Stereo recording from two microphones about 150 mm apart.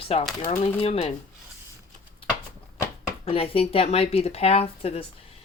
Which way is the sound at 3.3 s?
40° left (ahead or behind).